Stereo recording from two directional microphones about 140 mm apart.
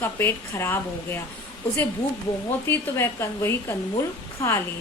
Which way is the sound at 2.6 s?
20° left (ahead or behind).